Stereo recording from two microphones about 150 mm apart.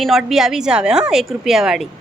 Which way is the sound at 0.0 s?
Centre (ahead or behind).